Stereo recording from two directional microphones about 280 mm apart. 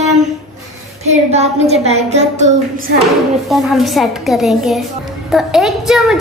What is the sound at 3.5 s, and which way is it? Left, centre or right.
A child's voice, centre.